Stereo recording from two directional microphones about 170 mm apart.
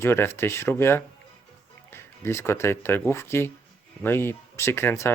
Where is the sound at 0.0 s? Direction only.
15° left (ahead or behind).